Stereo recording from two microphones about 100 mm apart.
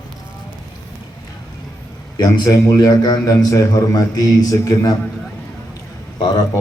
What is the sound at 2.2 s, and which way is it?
Speech, 40° left (ahead or behind).